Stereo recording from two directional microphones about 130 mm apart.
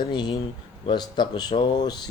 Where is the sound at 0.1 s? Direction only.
35° left (ahead or behind).